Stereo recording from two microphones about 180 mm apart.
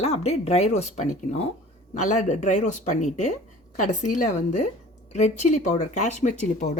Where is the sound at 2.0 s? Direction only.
45° left (ahead or behind).